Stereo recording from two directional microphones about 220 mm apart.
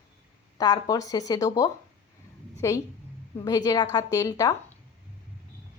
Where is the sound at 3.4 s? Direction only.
15° left (ahead or behind).